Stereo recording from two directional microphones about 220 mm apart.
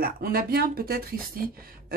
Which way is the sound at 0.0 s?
45° right (ahead or behind).